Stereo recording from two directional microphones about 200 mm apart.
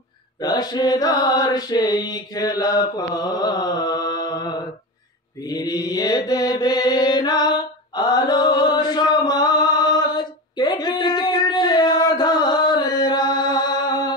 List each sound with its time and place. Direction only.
0.4 s mantra: 20° left (ahead or behind)